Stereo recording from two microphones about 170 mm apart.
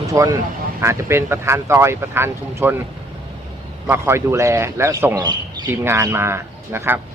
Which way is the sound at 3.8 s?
15° right (ahead or behind).